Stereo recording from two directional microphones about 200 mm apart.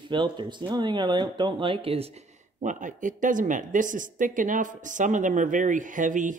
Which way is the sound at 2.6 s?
40° right (ahead or behind).